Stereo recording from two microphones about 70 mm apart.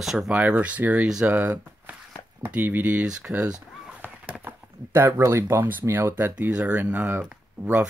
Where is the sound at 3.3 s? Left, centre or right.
Right.